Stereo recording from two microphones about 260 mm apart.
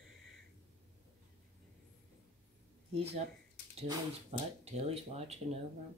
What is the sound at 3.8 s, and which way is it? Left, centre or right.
Speech, right.